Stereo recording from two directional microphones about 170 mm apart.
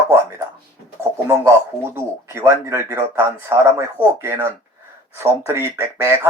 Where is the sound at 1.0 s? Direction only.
15° right (ahead or behind).